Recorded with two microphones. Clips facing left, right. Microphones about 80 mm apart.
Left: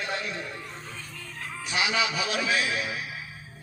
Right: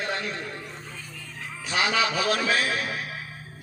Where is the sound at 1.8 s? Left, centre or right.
Right.